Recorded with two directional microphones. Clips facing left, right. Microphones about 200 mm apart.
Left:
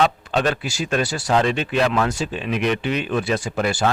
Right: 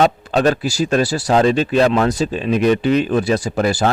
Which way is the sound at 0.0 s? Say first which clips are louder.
Right 5 dB; 40° right (ahead or behind).